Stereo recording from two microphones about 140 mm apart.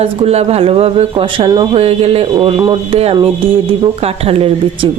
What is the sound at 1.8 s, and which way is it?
Speech, 45° right (ahead or behind).